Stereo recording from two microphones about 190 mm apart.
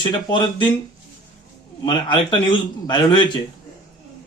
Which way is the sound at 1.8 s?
25° left (ahead or behind).